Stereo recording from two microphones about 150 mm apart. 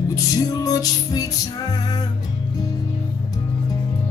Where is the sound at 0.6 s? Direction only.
25° left (ahead or behind).